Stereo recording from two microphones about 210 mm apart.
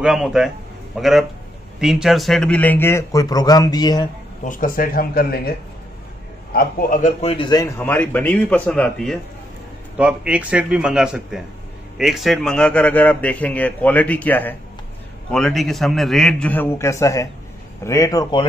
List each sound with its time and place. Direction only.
0.0 s a man's voice: 5° right (ahead or behind); by 4.1 s 20° left (ahead or behind)
4.5 s speech: 40° left (ahead or behind)
6.5 s a man's voice: 45° left (ahead or behind); by 18.5 s 20° left (ahead or behind)